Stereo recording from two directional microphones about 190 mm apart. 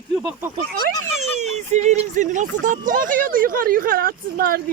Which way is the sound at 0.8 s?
40° right (ahead or behind).